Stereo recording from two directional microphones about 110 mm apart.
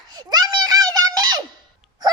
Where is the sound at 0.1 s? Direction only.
40° right (ahead or behind).